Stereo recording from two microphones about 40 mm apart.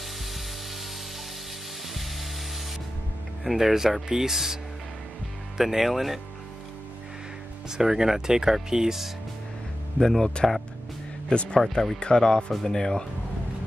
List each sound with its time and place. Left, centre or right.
3.4 s speech: centre
5.6 s speech: centre
7.7 s speech: centre
9.9 s speech: centre
11.2 s speech: left